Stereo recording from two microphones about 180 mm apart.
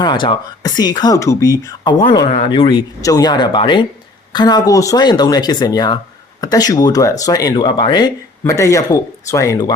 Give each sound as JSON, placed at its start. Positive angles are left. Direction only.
{"t": 0.0, "sound": "speech", "side_deg": 25}